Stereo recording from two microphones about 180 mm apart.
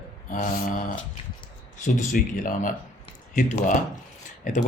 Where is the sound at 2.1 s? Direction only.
50° left (ahead or behind).